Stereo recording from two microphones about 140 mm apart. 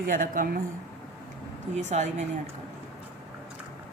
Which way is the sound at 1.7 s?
55° right (ahead or behind).